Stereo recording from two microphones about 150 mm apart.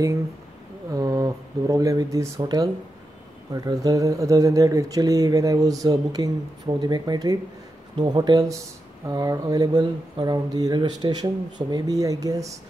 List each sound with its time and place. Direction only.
0.9 s speech: 25° right (ahead or behind)